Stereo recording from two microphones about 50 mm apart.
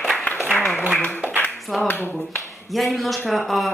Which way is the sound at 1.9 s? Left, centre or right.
Left.